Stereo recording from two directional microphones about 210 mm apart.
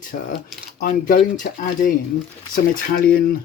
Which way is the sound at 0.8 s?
45° left (ahead or behind).